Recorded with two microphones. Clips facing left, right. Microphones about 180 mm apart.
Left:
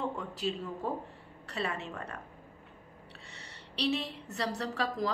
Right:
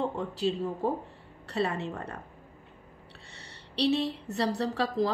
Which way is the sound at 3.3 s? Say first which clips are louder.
Right 6 dB; 30° right (ahead or behind).